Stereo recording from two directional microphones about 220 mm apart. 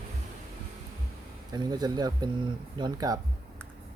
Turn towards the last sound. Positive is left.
turn(degrees=-20)  # may be behind; listen again after turning